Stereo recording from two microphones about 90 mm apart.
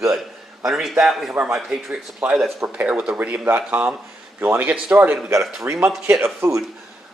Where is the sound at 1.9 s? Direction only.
15° right (ahead or behind).